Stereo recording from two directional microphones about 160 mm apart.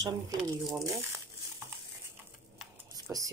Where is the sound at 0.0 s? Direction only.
20° right (ahead or behind).